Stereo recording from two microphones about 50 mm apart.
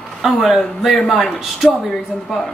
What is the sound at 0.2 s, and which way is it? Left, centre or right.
A man's voice, centre.